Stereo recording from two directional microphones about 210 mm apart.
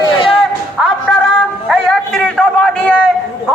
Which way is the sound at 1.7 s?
Centre (ahead or behind).